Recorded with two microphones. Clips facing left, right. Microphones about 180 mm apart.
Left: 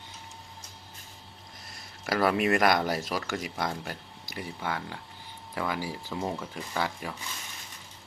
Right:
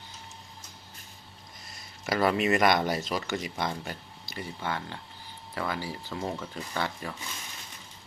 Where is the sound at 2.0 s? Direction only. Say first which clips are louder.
Even; centre (ahead or behind).